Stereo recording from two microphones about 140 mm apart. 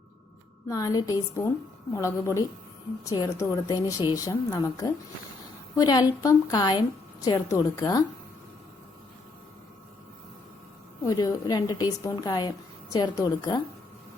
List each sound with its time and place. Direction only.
0.7 s a woman's voice: 25° left (ahead or behind)
11.0 s a woman's voice: 25° left (ahead or behind)